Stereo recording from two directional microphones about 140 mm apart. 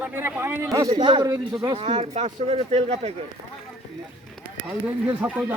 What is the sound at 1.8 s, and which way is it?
Speech, 50° right (ahead or behind).